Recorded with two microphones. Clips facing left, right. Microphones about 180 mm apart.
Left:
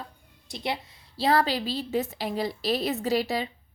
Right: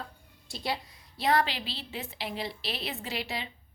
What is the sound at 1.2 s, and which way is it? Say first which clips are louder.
A woman's voice: left 4 dB; 35° left (ahead or behind).